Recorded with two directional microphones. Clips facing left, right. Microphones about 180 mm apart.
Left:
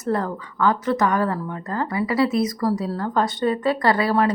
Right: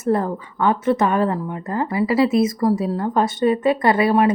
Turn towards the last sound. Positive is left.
turn(degrees=-20)  # may be behind; listen again after turning